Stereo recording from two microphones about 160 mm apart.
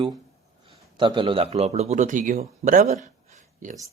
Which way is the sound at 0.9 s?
30° right (ahead or behind).